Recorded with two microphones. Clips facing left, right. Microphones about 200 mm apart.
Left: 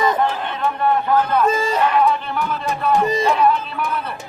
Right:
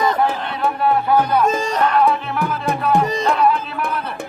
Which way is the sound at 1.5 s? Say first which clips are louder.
Even; 5° left (ahead or behind).